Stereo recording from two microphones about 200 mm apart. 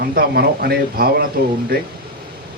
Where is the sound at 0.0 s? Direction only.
50° right (ahead or behind).